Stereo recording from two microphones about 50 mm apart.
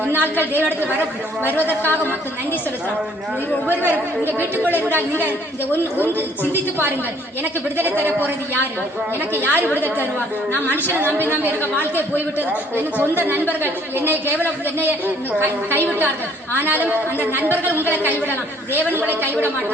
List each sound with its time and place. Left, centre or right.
0.0 s a woman's voice: right
1.8 s a woman's voice: left
3.8 s speech: left
7.8 s a woman's voice: right
9.3 s a woman's voice: right
9.6 s speech: left
10.9 s a woman's voice: right